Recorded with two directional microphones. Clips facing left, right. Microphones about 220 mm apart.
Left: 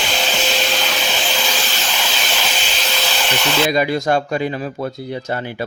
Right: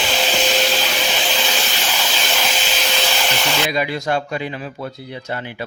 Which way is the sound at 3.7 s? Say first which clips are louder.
Left 4 dB; 45° left (ahead or behind).